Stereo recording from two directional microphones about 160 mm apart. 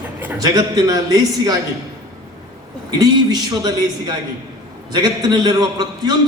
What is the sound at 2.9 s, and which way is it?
A man's voice, 25° right (ahead or behind).